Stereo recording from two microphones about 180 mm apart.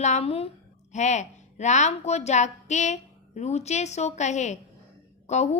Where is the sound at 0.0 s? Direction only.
35° left (ahead or behind).